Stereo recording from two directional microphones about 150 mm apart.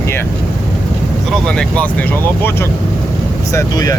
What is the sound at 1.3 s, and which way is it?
Speech, 5° left (ahead or behind).